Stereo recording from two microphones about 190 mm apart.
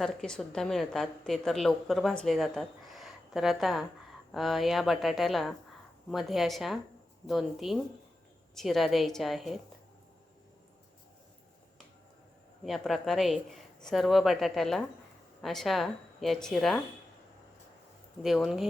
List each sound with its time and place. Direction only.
0.0 s a woman's voice: centre (ahead or behind)
12.6 s a woman's voice: centre (ahead or behind)
18.2 s a woman's voice: centre (ahead or behind)